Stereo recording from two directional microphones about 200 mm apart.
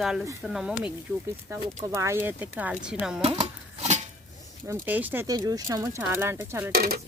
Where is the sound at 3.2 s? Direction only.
30° right (ahead or behind).